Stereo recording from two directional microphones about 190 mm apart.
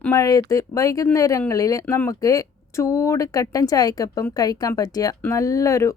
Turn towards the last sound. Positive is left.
turn(degrees=15)  # may be behind; listen again after turning